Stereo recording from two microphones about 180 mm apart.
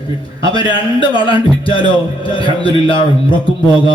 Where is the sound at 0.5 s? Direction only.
25° left (ahead or behind).